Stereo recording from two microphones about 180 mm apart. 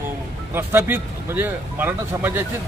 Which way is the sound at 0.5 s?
10° right (ahead or behind).